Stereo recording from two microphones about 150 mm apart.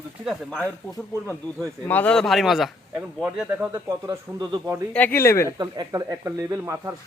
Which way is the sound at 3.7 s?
20° right (ahead or behind).